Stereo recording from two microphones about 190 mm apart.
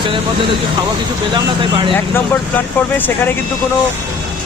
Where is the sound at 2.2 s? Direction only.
10° left (ahead or behind).